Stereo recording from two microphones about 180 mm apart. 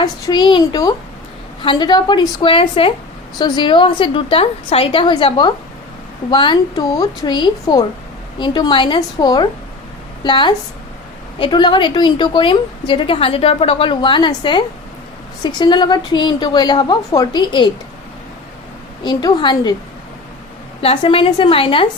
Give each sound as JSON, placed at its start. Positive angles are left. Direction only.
{"t": 0.0, "sound": "a woman's voice", "side_deg": 25}
{"t": 19.0, "sound": "a woman's voice", "side_deg": 25}
{"t": 20.8, "sound": "a woman's voice", "side_deg": 30}